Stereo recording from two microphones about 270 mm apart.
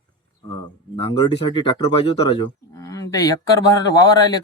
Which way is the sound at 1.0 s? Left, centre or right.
Centre.